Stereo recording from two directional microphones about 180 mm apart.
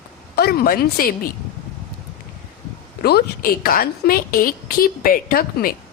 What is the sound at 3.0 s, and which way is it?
A woman's voice, 60° left (ahead or behind).